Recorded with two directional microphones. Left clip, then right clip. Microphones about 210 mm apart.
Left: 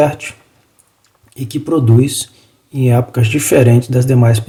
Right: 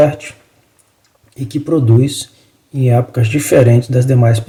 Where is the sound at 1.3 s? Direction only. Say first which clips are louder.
Even; 25° left (ahead or behind).